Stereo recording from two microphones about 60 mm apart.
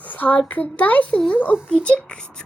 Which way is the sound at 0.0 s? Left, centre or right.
Left.